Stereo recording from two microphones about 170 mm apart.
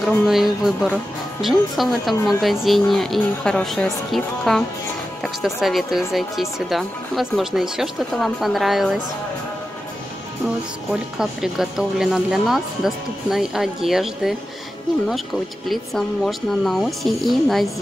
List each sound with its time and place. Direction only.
0.3 s speech: centre (ahead or behind)
10.9 s speech: 5° right (ahead or behind)
15.7 s speech: centre (ahead or behind)